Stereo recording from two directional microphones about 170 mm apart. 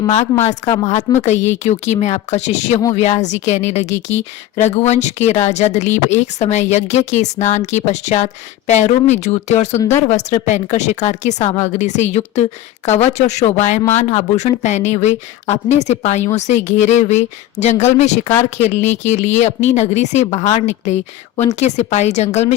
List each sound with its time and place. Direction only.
1.2 s speech: 40° left (ahead or behind)